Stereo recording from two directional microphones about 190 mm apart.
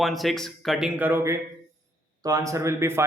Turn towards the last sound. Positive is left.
turn(degrees=-15)  # may be behind; listen again after turning